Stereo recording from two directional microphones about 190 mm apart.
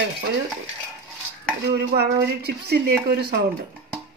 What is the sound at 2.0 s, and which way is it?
A woman's voice, 60° right (ahead or behind).